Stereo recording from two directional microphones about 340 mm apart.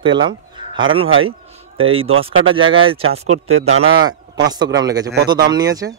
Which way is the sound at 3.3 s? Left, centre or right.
Right.